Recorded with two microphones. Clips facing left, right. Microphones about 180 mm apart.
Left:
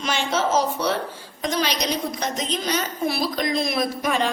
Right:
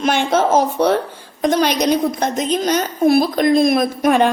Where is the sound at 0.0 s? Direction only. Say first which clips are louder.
Right 7 dB; 55° right (ahead or behind).